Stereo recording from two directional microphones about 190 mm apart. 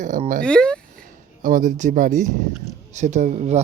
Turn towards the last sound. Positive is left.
turn(degrees=-40)  # may be behind; listen again after turning